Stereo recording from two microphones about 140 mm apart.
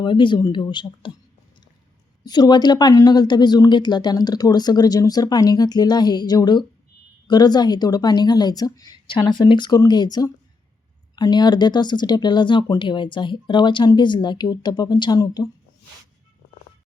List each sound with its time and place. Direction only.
0.0 s speech: 35° left (ahead or behind)
2.2 s speech: 30° left (ahead or behind)